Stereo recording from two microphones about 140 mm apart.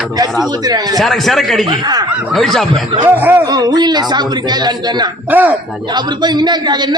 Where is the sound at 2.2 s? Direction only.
Centre (ahead or behind).